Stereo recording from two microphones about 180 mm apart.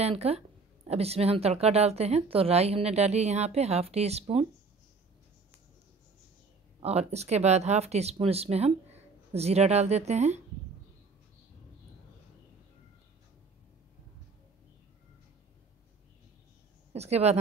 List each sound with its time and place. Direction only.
0.0 s speech: 35° right (ahead or behind)
6.8 s speech: 35° right (ahead or behind)
16.9 s a woman's voice: 35° right (ahead or behind)